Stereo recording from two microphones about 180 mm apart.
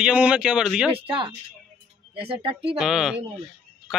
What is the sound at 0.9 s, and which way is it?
Speech, 30° right (ahead or behind).